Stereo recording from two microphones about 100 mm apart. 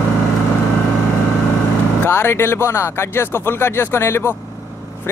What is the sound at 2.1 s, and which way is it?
Speech, 25° left (ahead or behind).